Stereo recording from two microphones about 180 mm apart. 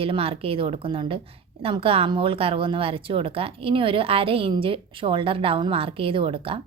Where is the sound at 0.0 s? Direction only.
30° right (ahead or behind).